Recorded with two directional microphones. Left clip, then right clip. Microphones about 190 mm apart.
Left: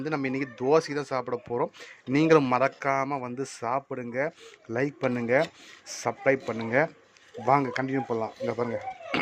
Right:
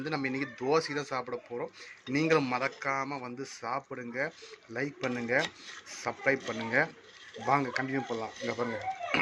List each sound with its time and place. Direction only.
0.0 s a man's voice: 20° left (ahead or behind)